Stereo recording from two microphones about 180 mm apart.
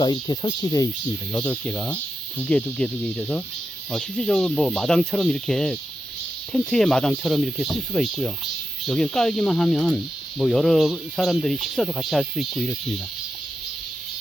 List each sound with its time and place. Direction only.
0.0 s speech: 20° left (ahead or behind)
1.3 s speech: 10° left (ahead or behind)